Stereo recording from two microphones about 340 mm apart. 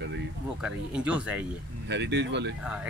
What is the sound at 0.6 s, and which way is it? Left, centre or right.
Speech, centre.